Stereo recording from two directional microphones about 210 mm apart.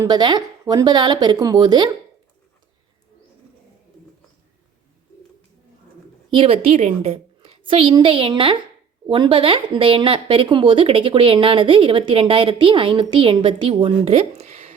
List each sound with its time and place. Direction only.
0.0 s speech: 20° right (ahead or behind)
6.3 s a woman's voice: 25° right (ahead or behind)